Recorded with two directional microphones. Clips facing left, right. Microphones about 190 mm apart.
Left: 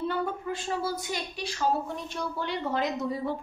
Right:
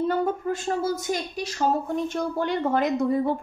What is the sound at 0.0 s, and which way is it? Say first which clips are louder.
A woman's voice: right 6 dB; 45° right (ahead or behind).